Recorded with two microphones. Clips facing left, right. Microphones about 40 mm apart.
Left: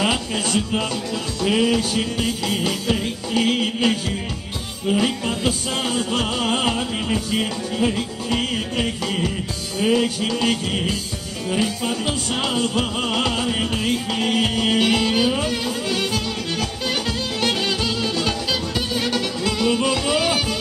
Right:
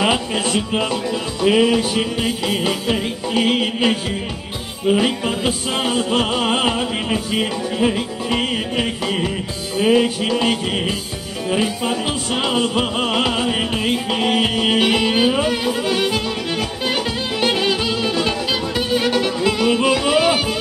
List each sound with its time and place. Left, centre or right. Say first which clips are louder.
0.0 s music: right 3 dB; right